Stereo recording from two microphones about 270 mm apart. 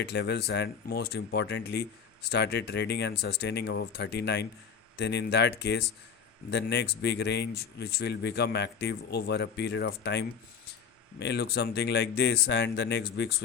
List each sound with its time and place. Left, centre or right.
0.0 s speech: left